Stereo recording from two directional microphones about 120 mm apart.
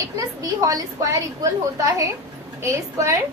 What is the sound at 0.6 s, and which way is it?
A woman's voice, 30° right (ahead or behind).